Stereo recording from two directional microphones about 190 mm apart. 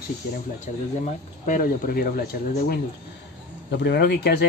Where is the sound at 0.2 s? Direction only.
55° left (ahead or behind).